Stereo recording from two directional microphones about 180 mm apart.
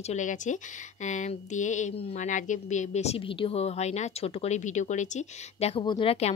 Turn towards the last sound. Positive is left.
turn(degrees=35)  # may be behind; listen again after turning